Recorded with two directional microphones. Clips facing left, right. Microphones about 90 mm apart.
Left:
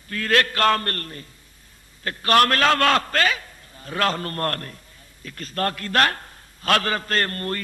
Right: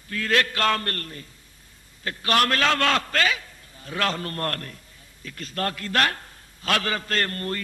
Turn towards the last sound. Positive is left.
turn(degrees=45)  # may be behind; listen again after turning